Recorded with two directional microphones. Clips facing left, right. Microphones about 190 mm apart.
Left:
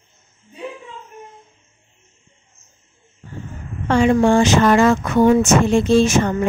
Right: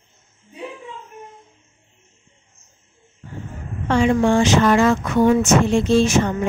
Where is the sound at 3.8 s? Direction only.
45° left (ahead or behind).